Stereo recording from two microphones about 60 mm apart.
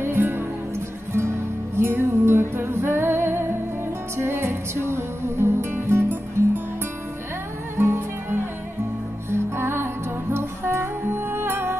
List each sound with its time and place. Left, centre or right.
0.0 s music: right
1.8 s music: right
7.7 s music: right